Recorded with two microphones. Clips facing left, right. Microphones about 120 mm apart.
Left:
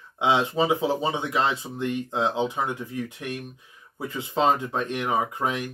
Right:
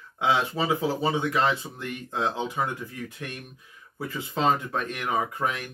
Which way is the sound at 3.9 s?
20° left (ahead or behind).